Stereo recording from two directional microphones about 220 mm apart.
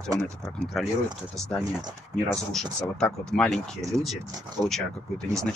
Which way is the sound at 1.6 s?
20° right (ahead or behind).